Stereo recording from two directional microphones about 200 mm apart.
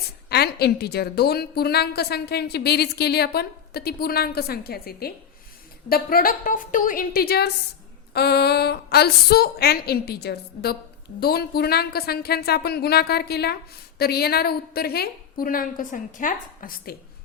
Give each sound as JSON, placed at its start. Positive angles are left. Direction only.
{"t": 0.3, "sound": "a woman's voice", "side_deg": 55}